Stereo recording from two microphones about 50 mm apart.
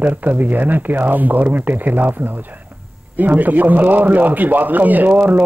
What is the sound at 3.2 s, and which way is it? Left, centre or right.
A man's voice, right.